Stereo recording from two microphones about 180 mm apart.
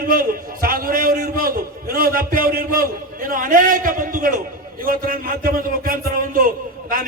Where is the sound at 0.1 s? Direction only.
55° right (ahead or behind).